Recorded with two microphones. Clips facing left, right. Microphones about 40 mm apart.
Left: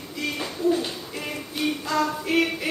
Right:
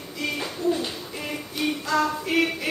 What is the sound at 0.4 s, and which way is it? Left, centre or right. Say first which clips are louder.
Owl: left 3 dB; centre.